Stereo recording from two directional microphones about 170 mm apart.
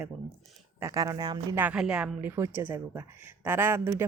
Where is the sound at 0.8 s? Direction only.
20° right (ahead or behind).